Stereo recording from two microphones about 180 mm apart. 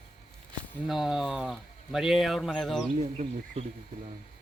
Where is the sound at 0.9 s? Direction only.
Centre (ahead or behind).